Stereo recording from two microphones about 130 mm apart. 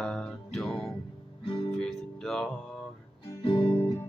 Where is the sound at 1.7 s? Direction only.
5° left (ahead or behind).